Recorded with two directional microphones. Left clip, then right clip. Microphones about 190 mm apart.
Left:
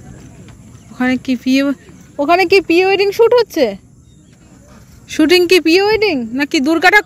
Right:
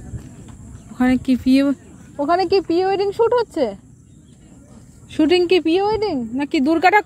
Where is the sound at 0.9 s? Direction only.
5° right (ahead or behind).